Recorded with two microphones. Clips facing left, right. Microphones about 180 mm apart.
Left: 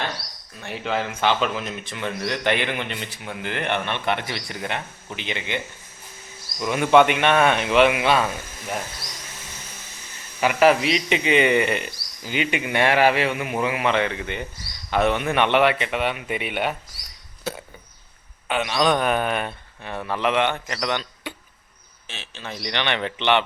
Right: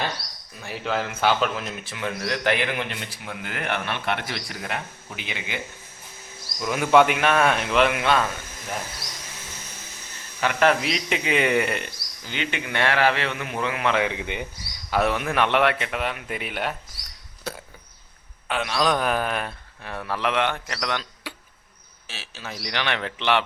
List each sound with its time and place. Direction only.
0.6 s a man's voice: centre (ahead or behind)
6.6 s a man's voice: centre (ahead or behind)
10.4 s a man's voice: 10° left (ahead or behind)
12.2 s speech: 10° left (ahead or behind)
13.9 s speech: 10° right (ahead or behind)
14.8 s a man's voice: centre (ahead or behind)
18.4 s a man's voice: centre (ahead or behind)